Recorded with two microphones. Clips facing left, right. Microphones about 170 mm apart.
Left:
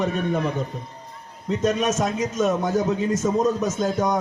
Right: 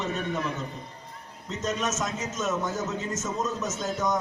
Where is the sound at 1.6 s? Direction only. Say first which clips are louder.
Left 7 dB; 60° left (ahead or behind).